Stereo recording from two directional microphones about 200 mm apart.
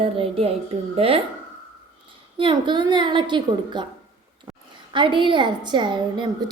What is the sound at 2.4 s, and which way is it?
A woman's voice, 25° right (ahead or behind).